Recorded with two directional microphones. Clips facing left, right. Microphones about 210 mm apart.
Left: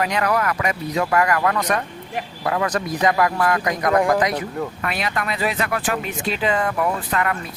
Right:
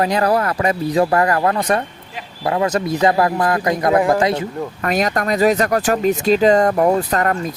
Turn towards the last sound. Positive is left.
turn(degrees=-40)  # may be behind; listen again after turning